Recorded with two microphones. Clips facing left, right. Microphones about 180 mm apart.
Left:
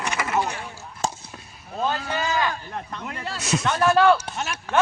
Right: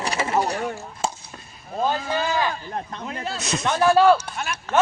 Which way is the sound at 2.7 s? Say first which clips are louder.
Right 2 dB; 25° right (ahead or behind).